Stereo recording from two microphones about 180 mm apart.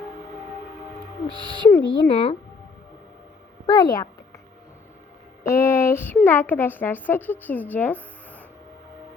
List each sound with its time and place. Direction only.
1.3 s speech: 25° right (ahead or behind)
1.9 s speech: 30° left (ahead or behind)
3.7 s speech: 20° left (ahead or behind)
5.4 s a sound: 15° left (ahead or behind)
6.2 s speech: 10° left (ahead or behind)